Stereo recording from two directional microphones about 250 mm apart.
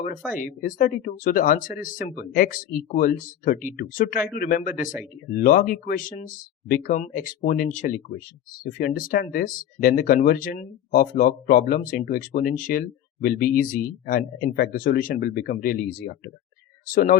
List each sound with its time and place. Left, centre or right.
0.3 s speech: left
16.8 s speech: left